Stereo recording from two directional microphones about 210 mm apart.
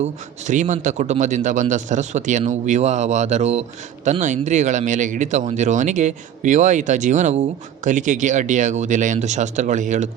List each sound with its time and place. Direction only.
0.0 s a man's voice: 35° right (ahead or behind)